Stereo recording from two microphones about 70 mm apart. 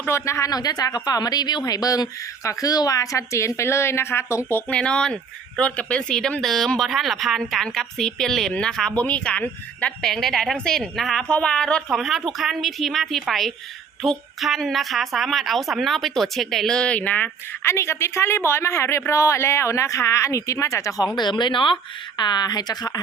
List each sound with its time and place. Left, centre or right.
0.1 s speech: left
0.5 s speech: left
4.7 s a woman's voice: centre
11.9 s a woman's voice: centre; by 17.3 s left
17.6 s speech: left
21.2 s speech: left